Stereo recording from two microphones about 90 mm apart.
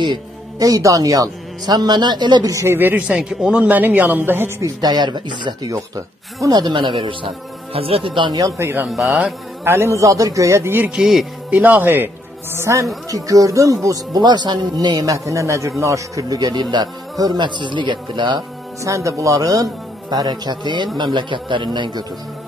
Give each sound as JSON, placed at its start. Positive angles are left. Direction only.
{"t": 0.6, "sound": "a man's voice", "side_deg": -40}
{"t": 2.4, "sound": "a man's voice", "side_deg": -35}
{"t": 3.1, "sound": "speech", "side_deg": -10}
{"t": 4.6, "sound": "a man's voice", "side_deg": -50}
{"t": 5.7, "sound": "speech", "side_deg": -40}
{"t": 8.4, "sound": "a man's voice", "side_deg": -35}
{"t": 8.8, "sound": "a man's voice", "side_deg": -5}
{"t": 9.7, "sound": "a man's voice", "side_deg": -30}
{"t": 11.0, "sound": "a man's voice", "side_deg": -5}
{"t": 11.5, "sound": "a man's voice", "side_deg": -20}
{"t": 18.9, "sound": "a man's voice", "side_deg": -35}